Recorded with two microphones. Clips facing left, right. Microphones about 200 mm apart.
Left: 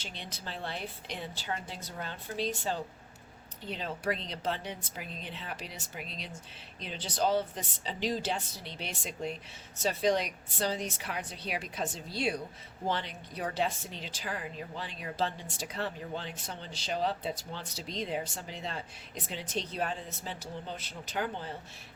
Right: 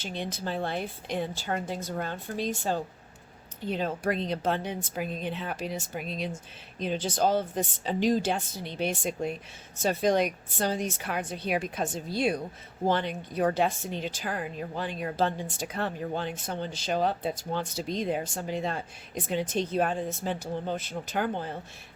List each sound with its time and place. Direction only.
0.0 s a woman's voice: 50° right (ahead or behind)